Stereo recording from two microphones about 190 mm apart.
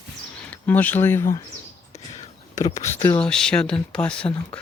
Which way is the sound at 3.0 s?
10° left (ahead or behind).